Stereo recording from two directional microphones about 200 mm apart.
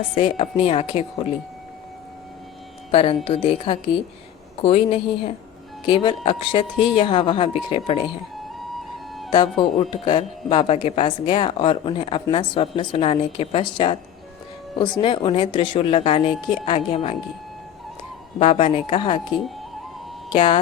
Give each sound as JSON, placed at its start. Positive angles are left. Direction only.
{"t": 0.1, "sound": "speech", "side_deg": 25}
{"t": 2.9, "sound": "speech", "side_deg": 30}
{"t": 9.3, "sound": "speech", "side_deg": 25}
{"t": 18.3, "sound": "speech", "side_deg": 30}
{"t": 20.3, "sound": "speech", "side_deg": 25}